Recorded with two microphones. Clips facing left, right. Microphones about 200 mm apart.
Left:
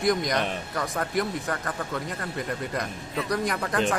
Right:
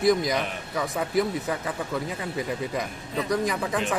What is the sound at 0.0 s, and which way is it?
A man's voice, 5° right (ahead or behind).